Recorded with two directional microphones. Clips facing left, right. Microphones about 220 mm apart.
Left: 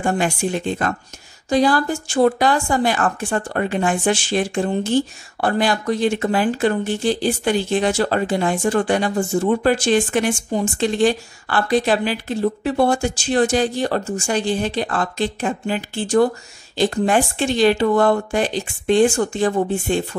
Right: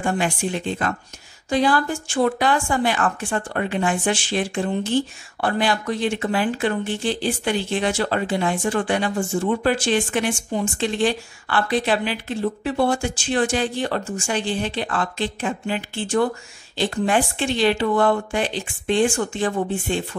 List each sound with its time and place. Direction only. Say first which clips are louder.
0.0 s speech: left 3 dB; 45° left (ahead or behind)